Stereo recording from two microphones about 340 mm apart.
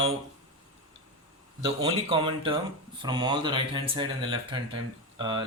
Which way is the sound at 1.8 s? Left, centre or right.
Centre.